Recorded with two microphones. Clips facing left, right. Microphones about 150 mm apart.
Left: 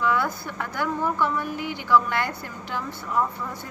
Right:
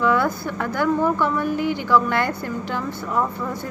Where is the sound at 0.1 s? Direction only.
55° right (ahead or behind).